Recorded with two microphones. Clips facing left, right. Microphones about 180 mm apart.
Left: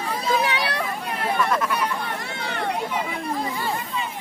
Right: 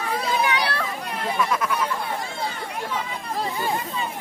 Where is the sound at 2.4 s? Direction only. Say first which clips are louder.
Left 3 dB; 70° left (ahead or behind).